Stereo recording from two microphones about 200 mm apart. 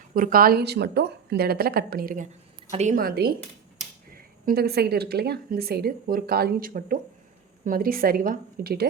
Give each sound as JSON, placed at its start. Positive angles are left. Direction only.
{"t": 0.1, "sound": "speech", "side_deg": -45}